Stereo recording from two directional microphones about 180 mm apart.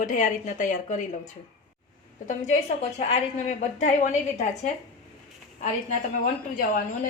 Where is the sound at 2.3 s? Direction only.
40° left (ahead or behind).